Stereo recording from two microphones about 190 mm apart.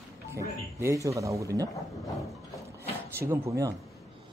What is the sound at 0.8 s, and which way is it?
Speech, 15° right (ahead or behind).